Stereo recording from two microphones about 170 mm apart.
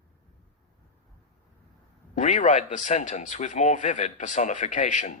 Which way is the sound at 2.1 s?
45° left (ahead or behind).